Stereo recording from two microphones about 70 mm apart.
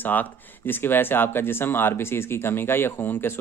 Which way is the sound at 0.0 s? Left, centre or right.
Left.